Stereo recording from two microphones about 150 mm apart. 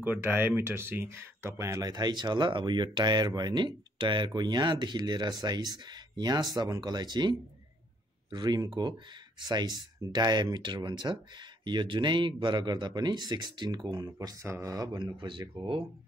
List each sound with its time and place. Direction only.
0.0 s speech: 15° right (ahead or behind); by 15.8 s 35° right (ahead or behind)